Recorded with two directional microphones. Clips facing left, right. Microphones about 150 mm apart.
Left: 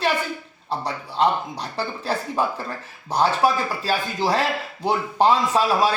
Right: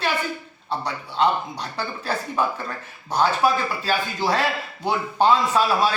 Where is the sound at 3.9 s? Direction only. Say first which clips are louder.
Left 1 dB; 35° left (ahead or behind).